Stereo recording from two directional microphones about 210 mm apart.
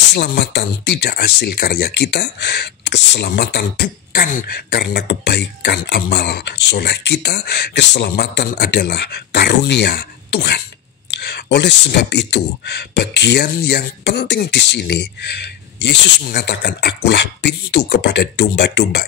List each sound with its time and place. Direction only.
0.1 s speech: 50° left (ahead or behind)